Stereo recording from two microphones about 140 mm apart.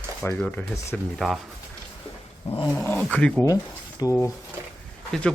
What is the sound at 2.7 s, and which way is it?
Speech, 10° left (ahead or behind).